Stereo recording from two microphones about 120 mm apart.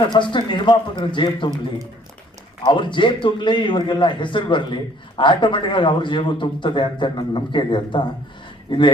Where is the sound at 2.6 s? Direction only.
40° left (ahead or behind).